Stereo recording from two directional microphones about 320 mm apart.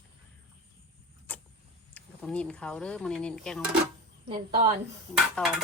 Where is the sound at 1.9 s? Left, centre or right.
Centre.